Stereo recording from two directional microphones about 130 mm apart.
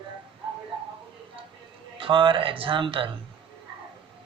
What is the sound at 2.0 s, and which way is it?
Speech, 40° right (ahead or behind).